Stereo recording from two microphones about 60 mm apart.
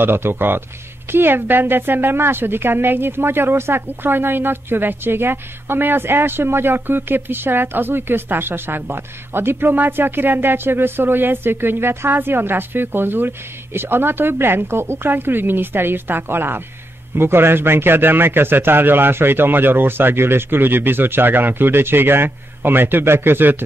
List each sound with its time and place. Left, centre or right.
0.0 s a woman's voice: right